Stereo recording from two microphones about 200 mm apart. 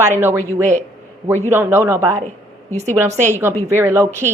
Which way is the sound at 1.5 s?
10° right (ahead or behind).